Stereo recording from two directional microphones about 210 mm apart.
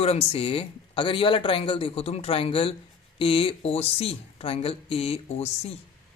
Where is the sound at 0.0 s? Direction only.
30° left (ahead or behind).